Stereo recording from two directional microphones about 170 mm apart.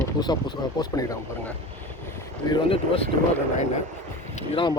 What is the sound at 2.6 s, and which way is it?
Speech, 35° left (ahead or behind).